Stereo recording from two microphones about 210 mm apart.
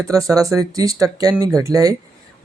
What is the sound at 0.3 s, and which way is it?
Speech, 15° right (ahead or behind).